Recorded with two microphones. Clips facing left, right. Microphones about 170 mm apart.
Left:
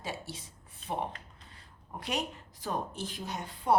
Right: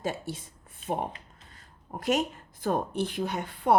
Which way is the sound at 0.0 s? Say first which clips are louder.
Right 7 dB; 50° right (ahead or behind).